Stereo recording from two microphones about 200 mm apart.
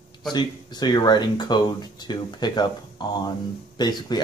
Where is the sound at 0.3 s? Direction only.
20° left (ahead or behind).